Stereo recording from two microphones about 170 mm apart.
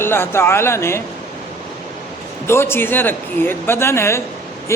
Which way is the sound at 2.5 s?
15° left (ahead or behind).